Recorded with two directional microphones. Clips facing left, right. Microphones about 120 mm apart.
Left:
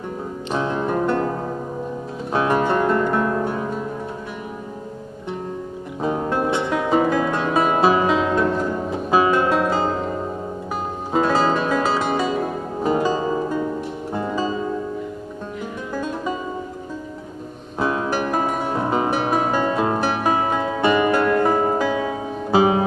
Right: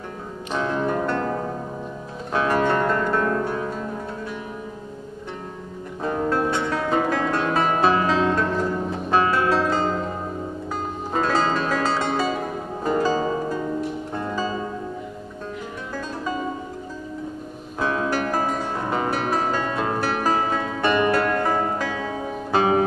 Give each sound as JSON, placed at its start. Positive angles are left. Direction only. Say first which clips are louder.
{"t": 0.5, "sound": "music", "louder": "left 1 dB", "side_deg": 20}
{"t": 2.3, "sound": "music", "louder": "left 2 dB", "side_deg": 15}
{"t": 5.9, "sound": "music", "louder": "left 1 dB", "side_deg": 15}
{"t": 11.1, "sound": "music", "louder": "left 3 dB", "side_deg": 10}
{"t": 15.9, "sound": "music", "louder": "left 4 dB", "side_deg": 15}
{"t": 17.8, "sound": "music", "louder": "left 1 dB", "side_deg": 15}